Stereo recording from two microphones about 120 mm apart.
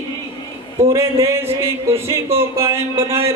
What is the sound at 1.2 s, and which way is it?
Speech, 20° right (ahead or behind).